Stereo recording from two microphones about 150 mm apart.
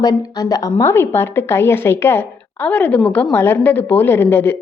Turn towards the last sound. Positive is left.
turn(degrees=15)  # may be behind; listen again after turning